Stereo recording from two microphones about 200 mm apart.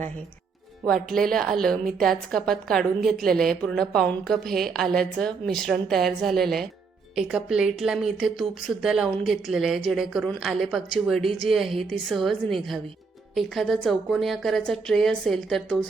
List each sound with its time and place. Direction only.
1.1 s a woman's voice: centre (ahead or behind)